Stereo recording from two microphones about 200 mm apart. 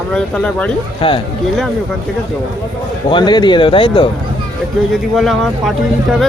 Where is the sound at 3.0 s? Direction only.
25° left (ahead or behind).